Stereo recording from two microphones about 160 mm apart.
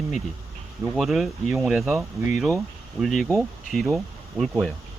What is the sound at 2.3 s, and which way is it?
Speech, centre (ahead or behind).